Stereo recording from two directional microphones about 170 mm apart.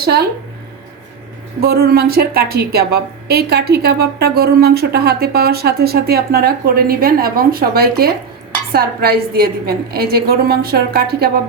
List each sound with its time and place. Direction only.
0.0 s speech: 70° right (ahead or behind)
1.6 s a woman's voice: 70° right (ahead or behind)